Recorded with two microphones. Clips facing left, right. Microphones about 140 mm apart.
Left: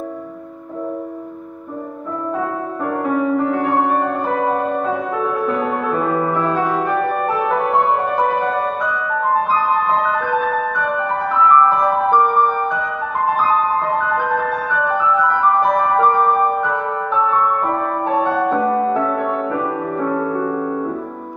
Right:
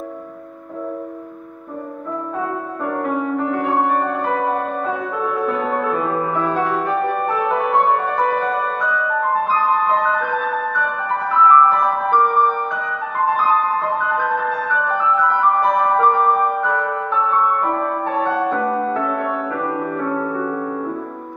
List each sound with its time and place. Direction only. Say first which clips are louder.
2.9 s music: left 3 dB; centre (ahead or behind)
18.2 s music: left 1 dB; 15° left (ahead or behind)
20.1 s music: left 4 dB; 5° left (ahead or behind)
20.3 s music: left 2 dB; 20° left (ahead or behind)